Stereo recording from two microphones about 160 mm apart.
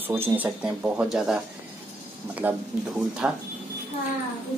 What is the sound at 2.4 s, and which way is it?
Speech, 10° right (ahead or behind).